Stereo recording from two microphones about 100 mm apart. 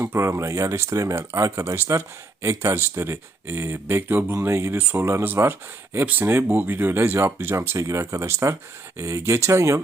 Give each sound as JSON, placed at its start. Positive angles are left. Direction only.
{"t": 0.0, "sound": "speech", "side_deg": -25}